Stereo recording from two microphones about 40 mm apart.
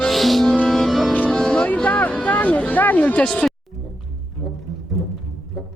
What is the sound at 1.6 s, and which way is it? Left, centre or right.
Speech, left.